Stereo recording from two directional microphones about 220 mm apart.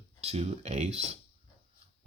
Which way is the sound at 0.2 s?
30° right (ahead or behind).